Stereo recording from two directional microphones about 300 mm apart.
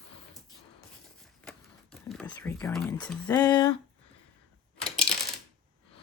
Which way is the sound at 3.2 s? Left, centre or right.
Centre.